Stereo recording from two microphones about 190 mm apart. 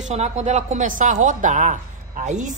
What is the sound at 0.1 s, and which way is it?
Speech, 35° right (ahead or behind).